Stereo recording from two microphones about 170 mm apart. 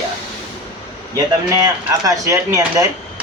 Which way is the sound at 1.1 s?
20° right (ahead or behind).